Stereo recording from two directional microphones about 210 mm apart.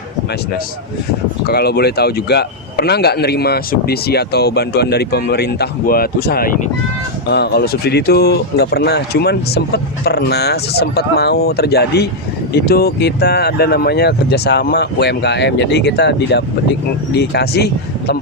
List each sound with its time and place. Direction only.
1.5 s a man's voice: 50° left (ahead or behind)